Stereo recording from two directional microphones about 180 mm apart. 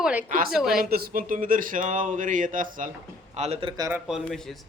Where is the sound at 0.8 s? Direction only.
55° right (ahead or behind).